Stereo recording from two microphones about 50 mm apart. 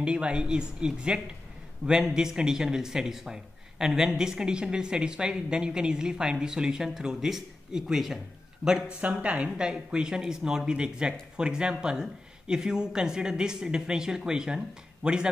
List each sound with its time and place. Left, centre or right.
0.0 s speech: centre
9.0 s speech: right